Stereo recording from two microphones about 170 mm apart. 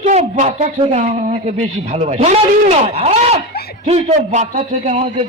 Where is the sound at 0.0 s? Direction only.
45° right (ahead or behind).